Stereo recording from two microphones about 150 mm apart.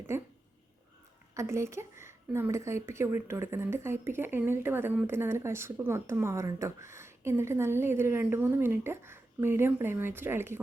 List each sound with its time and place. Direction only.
0.1 s a woman's voice: 15° right (ahead or behind)
1.3 s a woman's voice: 20° right (ahead or behind)